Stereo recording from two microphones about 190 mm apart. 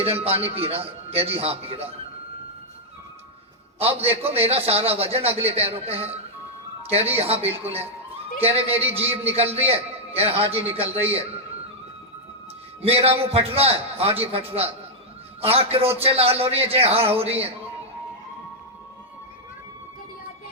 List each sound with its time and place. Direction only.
0.0 s a man's voice: 30° right (ahead or behind)
4.1 s a man's voice: 30° right (ahead or behind)
8.8 s a man's voice: 10° right (ahead or behind)
9.0 s a man's voice: 30° right (ahead or behind)
12.8 s a man's voice: 30° right (ahead or behind)